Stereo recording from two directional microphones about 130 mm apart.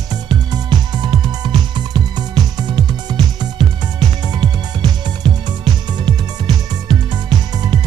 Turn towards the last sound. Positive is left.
turn(degrees=-35)  # may be behind; listen again after turning